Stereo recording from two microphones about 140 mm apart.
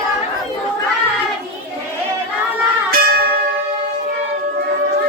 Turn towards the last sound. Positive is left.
turn(degrees=-90)